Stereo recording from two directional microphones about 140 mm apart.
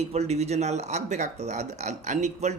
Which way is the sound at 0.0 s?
50° right (ahead or behind).